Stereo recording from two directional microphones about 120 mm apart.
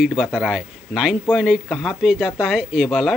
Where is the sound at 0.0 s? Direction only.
5° right (ahead or behind).